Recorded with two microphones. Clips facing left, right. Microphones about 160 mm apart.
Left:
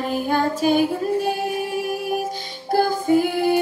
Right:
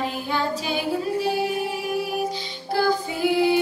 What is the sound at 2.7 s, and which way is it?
Music, 50° left (ahead or behind).